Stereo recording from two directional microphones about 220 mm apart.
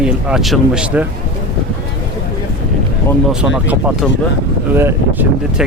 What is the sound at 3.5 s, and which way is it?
Speech, 5° right (ahead or behind).